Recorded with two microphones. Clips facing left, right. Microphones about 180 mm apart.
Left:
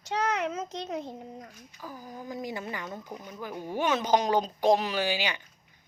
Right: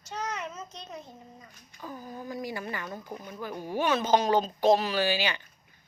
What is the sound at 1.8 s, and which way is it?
A child's voice, 5° left (ahead or behind).